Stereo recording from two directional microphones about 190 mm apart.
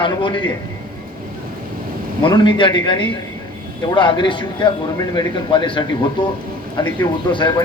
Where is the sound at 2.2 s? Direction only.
25° left (ahead or behind).